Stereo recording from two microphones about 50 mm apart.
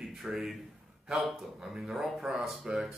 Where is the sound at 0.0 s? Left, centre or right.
Centre.